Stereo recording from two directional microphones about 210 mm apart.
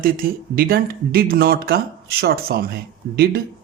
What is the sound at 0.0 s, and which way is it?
Speech, 45° right (ahead or behind).